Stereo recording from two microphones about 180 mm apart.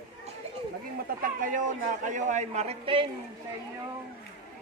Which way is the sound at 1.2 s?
50° right (ahead or behind).